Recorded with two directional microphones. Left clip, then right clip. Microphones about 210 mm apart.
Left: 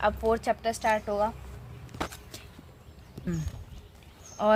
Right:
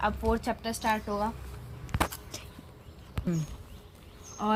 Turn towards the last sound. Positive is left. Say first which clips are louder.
# left 6 dB
turn(degrees=50)  # may be behind; listen again after turning